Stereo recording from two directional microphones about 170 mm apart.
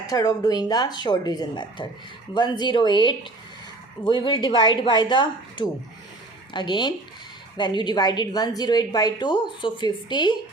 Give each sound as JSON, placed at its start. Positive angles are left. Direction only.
{"t": 0.1, "sound": "a woman's voice", "side_deg": 20}